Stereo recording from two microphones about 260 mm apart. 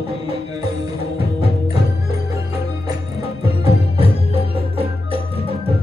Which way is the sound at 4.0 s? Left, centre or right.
Right.